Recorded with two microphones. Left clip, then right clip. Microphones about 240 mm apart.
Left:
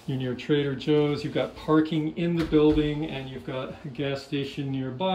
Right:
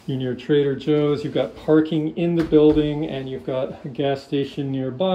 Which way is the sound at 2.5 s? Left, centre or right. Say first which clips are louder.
Right 6 dB; left.